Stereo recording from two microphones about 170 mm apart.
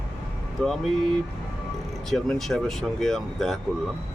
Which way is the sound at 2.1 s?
Centre (ahead or behind).